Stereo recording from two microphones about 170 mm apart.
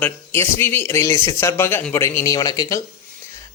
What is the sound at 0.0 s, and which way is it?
Speech, 15° left (ahead or behind).